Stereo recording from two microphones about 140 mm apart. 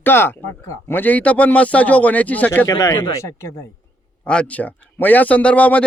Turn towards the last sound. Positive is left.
turn(degrees=10)  # may be behind; listen again after turning